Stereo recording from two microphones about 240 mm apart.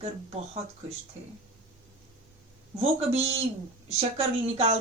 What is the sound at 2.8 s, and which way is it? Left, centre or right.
A woman's voice, right.